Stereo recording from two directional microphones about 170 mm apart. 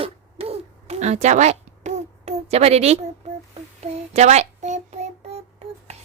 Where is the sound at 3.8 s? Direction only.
40° right (ahead or behind).